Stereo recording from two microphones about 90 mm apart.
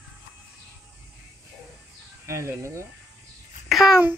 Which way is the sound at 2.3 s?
30° right (ahead or behind).